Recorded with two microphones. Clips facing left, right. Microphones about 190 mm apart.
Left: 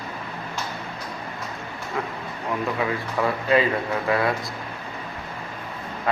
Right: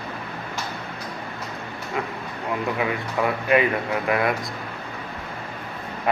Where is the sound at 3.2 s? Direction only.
20° right (ahead or behind).